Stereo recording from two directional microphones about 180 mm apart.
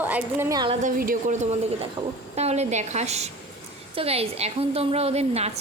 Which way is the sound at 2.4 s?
35° right (ahead or behind).